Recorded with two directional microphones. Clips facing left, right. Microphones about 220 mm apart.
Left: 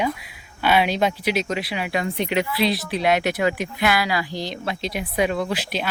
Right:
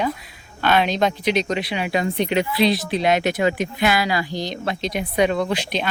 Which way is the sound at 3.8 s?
25° right (ahead or behind).